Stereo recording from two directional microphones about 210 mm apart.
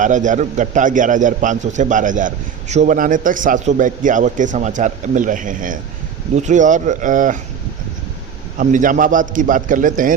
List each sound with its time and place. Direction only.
0.0 s a man's voice: 35° right (ahead or behind)
8.5 s a man's voice: 40° right (ahead or behind)